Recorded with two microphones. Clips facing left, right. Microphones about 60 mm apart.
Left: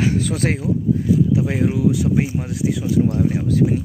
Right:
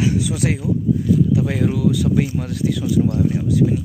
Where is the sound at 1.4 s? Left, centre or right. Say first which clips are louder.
Even; centre.